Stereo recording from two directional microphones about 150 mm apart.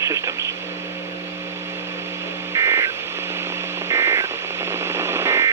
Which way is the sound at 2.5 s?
20° right (ahead or behind).